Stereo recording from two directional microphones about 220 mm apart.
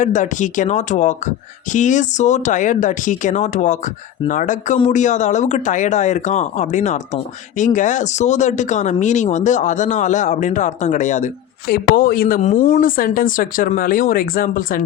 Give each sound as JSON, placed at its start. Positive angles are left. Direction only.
{"t": 0.0, "sound": "speech", "side_deg": 35}
{"t": 12.8, "sound": "speech", "side_deg": 40}